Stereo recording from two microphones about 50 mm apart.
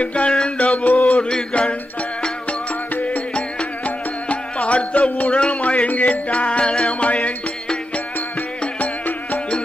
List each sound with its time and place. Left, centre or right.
0.0 s music: left
3.3 s music: left
8.7 s insect: left